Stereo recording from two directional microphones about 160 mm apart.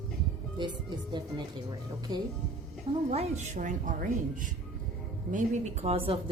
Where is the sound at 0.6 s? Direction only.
30° right (ahead or behind).